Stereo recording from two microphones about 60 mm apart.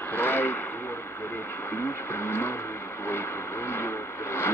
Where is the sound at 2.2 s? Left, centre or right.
Left.